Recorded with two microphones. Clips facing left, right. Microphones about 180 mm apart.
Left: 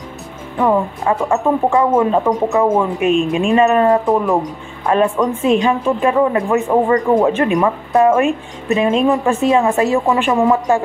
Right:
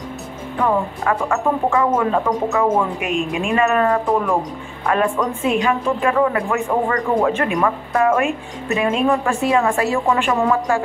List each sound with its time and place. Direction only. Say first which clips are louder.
1.0 s a woman's voice: left 3 dB; 25° left (ahead or behind)